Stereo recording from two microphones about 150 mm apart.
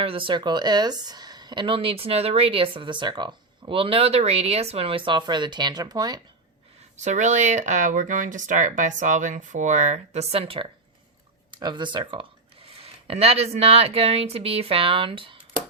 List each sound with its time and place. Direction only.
0.0 s a woman's voice: 35° right (ahead or behind)
6.9 s a woman's voice: 50° right (ahead or behind); by 15.4 s 35° right (ahead or behind)